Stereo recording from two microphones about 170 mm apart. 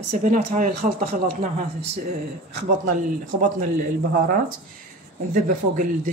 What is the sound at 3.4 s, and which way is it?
Speech, 50° right (ahead or behind).